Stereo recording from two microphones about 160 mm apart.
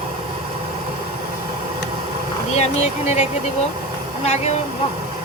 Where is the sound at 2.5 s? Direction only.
45° left (ahead or behind).